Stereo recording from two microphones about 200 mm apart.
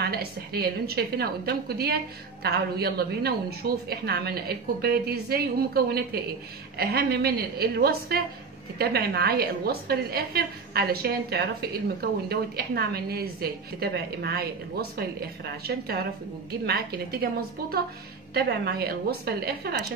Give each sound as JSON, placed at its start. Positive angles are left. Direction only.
{"t": 0.0, "sound": "a woman's voice", "side_deg": -50}